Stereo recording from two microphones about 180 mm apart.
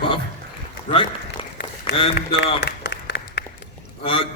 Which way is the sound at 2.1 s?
70° left (ahead or behind).